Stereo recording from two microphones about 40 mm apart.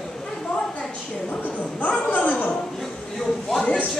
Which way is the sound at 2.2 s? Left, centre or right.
Left.